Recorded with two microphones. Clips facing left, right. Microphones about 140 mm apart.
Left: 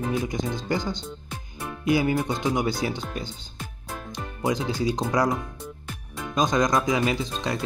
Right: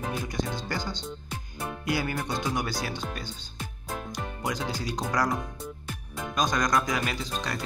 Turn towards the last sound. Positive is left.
turn(degrees=20)  # may be behind; listen again after turning